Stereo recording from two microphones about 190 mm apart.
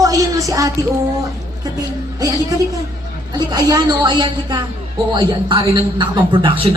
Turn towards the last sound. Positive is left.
turn(degrees=-25)  # may be behind; listen again after turning